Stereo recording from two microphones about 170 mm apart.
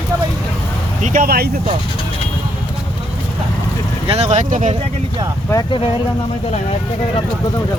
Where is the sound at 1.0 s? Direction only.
55° right (ahead or behind).